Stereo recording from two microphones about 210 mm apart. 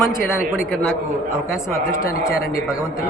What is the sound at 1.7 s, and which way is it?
Speech, 15° left (ahead or behind).